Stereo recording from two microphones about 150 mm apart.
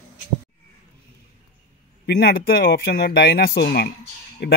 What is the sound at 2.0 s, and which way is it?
Speech, 90° left.